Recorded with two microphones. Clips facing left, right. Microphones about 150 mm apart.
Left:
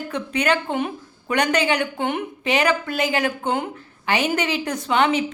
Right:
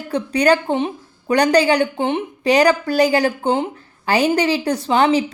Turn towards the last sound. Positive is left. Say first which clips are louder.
# right 4 dB
turn(degrees=-35)  # may be behind; listen again after turning